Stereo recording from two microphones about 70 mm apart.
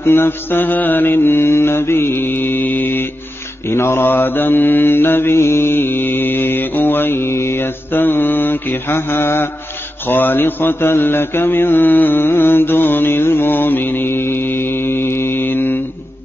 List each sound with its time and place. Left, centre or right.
0.0 s mantra: left